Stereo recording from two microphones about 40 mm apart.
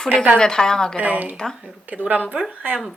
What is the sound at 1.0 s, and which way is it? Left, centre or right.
Speech, right.